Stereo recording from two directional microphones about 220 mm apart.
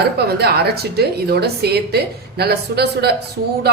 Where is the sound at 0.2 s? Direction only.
45° right (ahead or behind).